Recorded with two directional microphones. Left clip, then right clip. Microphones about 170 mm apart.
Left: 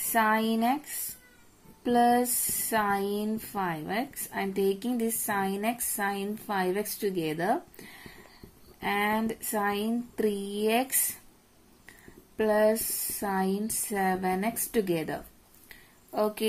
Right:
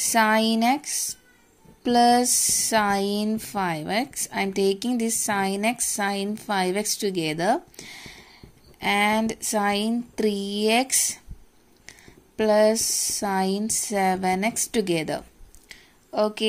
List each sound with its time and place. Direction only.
0.1 s speech: 35° right (ahead or behind)
1.8 s a woman's voice: 30° right (ahead or behind)
12.4 s a woman's voice: 25° right (ahead or behind)
15.7 s a sound: 20° right (ahead or behind)